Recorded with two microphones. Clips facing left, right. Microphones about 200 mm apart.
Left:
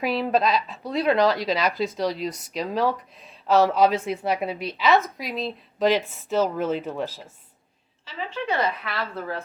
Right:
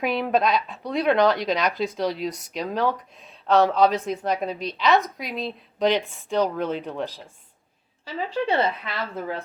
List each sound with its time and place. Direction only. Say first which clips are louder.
0.0 s speech: even; centre (ahead or behind)
8.0 s a woman's voice: right 4 dB; 35° right (ahead or behind)
8.8 s a woman's voice: even; 15° right (ahead or behind)